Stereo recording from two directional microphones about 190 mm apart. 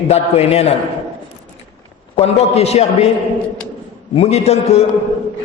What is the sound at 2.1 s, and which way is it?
Speech, 30° left (ahead or behind).